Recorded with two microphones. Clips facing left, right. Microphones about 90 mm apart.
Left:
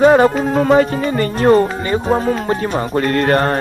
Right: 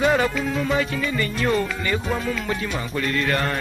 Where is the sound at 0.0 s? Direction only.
40° left (ahead or behind).